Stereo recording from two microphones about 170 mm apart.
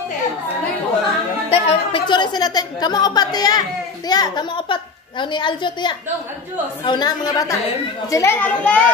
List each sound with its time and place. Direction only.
1.5 s a woman's voice: 35° left (ahead or behind); by 8.8 s 10° left (ahead or behind)